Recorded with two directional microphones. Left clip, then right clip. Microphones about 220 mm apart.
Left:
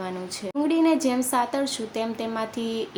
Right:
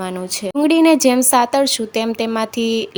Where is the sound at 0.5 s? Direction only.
40° right (ahead or behind).